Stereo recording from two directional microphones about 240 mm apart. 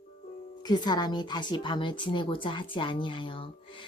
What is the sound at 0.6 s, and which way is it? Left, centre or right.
Speech, centre.